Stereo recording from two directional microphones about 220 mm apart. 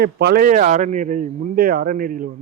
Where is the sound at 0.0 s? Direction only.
50° right (ahead or behind).